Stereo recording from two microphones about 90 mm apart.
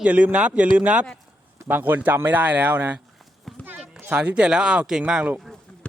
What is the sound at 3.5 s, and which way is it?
Clip-clop, centre (ahead or behind).